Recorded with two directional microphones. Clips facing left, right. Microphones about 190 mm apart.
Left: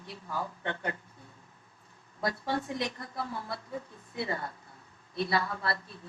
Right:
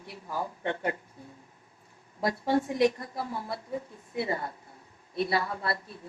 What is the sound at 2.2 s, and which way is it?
A woman's voice, 25° right (ahead or behind).